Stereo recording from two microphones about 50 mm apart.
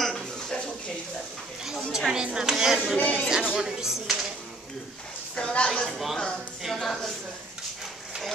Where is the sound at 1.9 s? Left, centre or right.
Centre.